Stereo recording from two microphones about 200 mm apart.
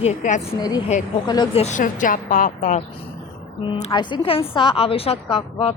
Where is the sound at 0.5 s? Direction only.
20° left (ahead or behind).